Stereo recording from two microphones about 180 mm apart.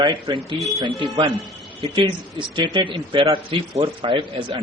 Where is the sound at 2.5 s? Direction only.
25° right (ahead or behind).